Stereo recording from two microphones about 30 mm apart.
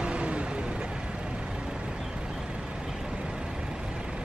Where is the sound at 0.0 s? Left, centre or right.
Right.